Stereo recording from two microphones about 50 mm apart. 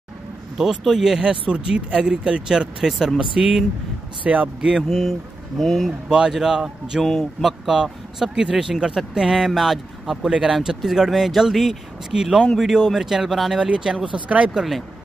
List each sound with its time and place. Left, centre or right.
0.6 s speech: centre
1.2 s speech: right
2.9 s speech: centre
3.2 s speech: centre
4.2 s speech: right
4.6 s speech: centre
4.8 s speech: centre
5.9 s speech: centre
7.0 s speech: centre
7.6 s speech: centre
10.2 s speech: centre
13.6 s speech: centre
14.1 s speech: right
14.5 s speech: centre